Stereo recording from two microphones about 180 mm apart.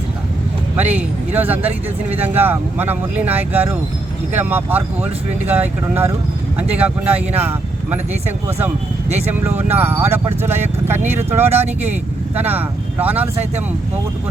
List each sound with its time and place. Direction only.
0.9 s speech: 10° right (ahead or behind)
9.3 s speech: 10° right (ahead or behind)